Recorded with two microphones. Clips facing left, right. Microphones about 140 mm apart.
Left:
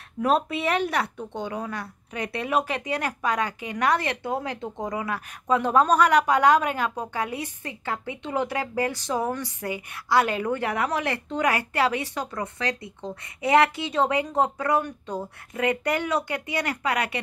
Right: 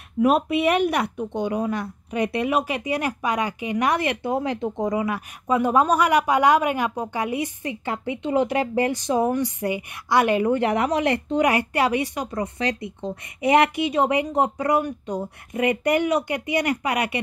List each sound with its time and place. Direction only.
0.2 s speech: 15° right (ahead or behind)